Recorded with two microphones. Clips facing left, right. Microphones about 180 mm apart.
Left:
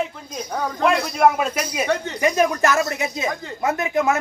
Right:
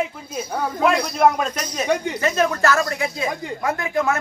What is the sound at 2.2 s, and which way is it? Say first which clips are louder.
Speech: left 1 dB; 15° left (ahead or behind).